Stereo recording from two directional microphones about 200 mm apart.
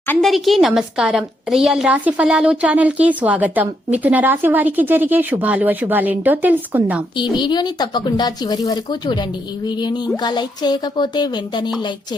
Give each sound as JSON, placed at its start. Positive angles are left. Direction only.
{"t": 0.1, "sound": "a woman's voice", "side_deg": 0}
{"t": 7.2, "sound": "speech", "side_deg": 20}